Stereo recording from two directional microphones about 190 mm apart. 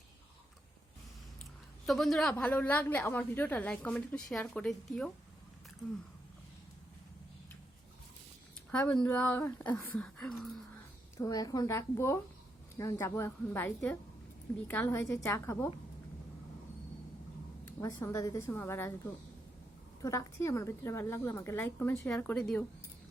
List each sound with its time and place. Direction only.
1.9 s a woman's voice: centre (ahead or behind)
8.7 s a woman's voice: 5° left (ahead or behind)
11.2 s a woman's voice: 20° left (ahead or behind)
17.7 s a woman's voice: 15° left (ahead or behind)